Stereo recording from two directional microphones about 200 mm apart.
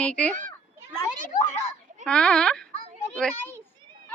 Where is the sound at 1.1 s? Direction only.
40° left (ahead or behind).